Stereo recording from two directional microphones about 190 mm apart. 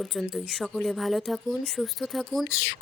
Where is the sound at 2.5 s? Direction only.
65° left (ahead or behind).